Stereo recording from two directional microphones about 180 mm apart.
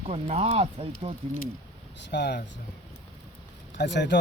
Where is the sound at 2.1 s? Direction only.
65° left (ahead or behind).